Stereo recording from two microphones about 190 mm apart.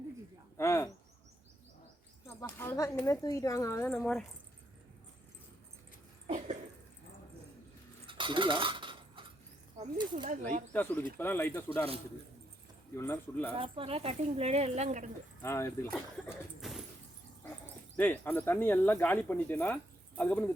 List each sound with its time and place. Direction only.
0.5 s speech: 15° left (ahead or behind)
2.2 s speech: 10° left (ahead or behind)
6.2 s a sound: 35° right (ahead or behind)
8.0 s coin: 25° right (ahead or behind)
9.7 s speech: 25° right (ahead or behind)
10.7 s speech: 10° left (ahead or behind)
13.0 s speech: 10° left (ahead or behind)
13.5 s speech: 30° right (ahead or behind)
15.4 s speech: 15° left (ahead or behind)
16.6 s a sound: centre (ahead or behind)
17.9 s speech: 10° left (ahead or behind)